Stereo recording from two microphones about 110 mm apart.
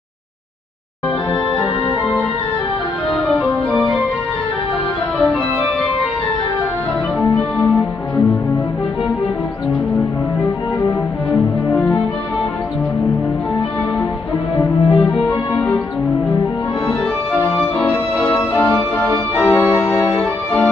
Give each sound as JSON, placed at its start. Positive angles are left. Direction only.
{"t": 14.6, "sound": "music", "side_deg": 15}
{"t": 18.3, "sound": "music", "side_deg": 15}
{"t": 19.3, "sound": "organ", "side_deg": 15}